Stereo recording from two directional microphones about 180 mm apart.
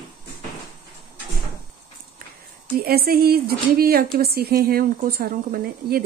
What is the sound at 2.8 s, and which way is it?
Speech, 60° right (ahead or behind).